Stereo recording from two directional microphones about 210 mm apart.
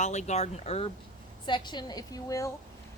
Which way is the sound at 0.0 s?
35° left (ahead or behind).